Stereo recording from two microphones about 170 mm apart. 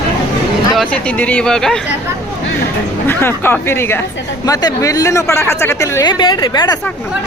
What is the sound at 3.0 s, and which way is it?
A man's voice, 15° left (ahead or behind).